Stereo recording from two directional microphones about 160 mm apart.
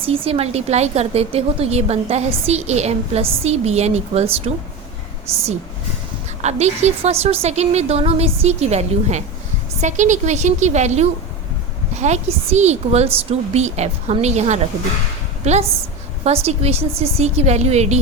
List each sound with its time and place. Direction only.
0.0 s a woman's voice: 35° right (ahead or behind)
6.4 s a woman's voice: 45° right (ahead or behind)